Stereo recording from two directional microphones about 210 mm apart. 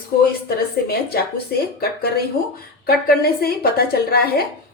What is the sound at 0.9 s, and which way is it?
A woman's voice, 45° left (ahead or behind).